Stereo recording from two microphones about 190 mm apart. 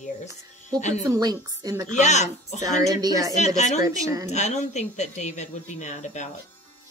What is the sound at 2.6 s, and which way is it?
Speech, 20° right (ahead or behind).